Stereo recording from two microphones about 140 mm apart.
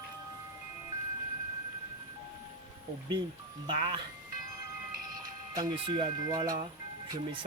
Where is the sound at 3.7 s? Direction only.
35° right (ahead or behind).